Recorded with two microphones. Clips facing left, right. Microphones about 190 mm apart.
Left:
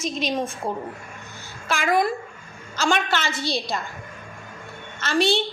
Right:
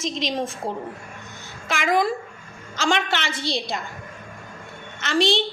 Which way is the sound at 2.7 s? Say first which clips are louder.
Even; 20° right (ahead or behind).